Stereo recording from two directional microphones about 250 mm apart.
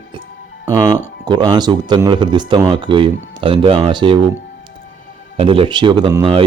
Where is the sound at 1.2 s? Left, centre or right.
Centre.